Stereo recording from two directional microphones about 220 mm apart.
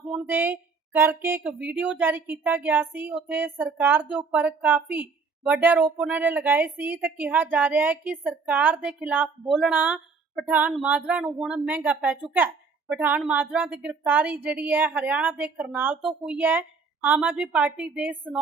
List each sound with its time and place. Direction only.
0.1 s speech: 10° right (ahead or behind)